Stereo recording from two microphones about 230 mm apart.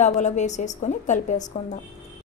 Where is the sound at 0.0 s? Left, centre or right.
Left.